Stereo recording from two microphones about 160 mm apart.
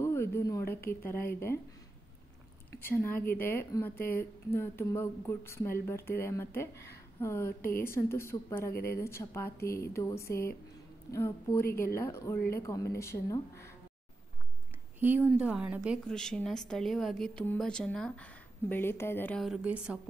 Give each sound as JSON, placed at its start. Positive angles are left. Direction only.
{"t": 0.0, "sound": "a woman's voice", "side_deg": 15}
{"t": 2.7, "sound": "speech", "side_deg": 15}
{"t": 11.6, "sound": "speech", "side_deg": 70}
{"t": 11.9, "sound": "speech", "side_deg": 15}
{"t": 15.0, "sound": "speech", "side_deg": -10}
{"t": 16.1, "sound": "speech", "side_deg": 5}
{"t": 19.4, "sound": "speech", "side_deg": -5}